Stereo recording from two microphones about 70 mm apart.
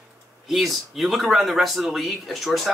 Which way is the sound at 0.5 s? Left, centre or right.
Centre.